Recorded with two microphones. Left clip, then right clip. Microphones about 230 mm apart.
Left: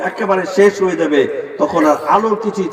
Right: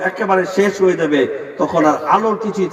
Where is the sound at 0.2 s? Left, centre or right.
Left.